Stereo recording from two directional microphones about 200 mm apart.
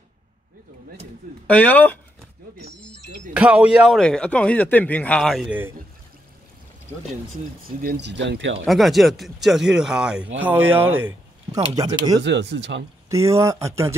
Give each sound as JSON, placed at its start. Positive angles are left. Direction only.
{"t": 1.5, "sound": "speech", "side_deg": 10}
{"t": 3.3, "sound": "a man's voice", "side_deg": -5}
{"t": 7.8, "sound": "speech", "side_deg": -55}
{"t": 8.6, "sound": "a man's voice", "side_deg": 0}
{"t": 11.7, "sound": "speech", "side_deg": -20}
{"t": 12.2, "sound": "speech", "side_deg": -60}
{"t": 13.1, "sound": "speech", "side_deg": -15}